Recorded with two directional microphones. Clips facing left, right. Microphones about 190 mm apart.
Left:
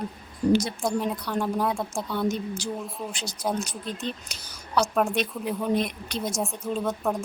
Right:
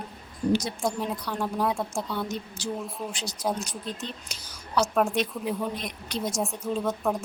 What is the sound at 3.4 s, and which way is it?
Speech, centre (ahead or behind).